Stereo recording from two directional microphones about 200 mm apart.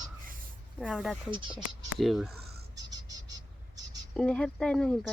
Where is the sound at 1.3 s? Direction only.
25° right (ahead or behind).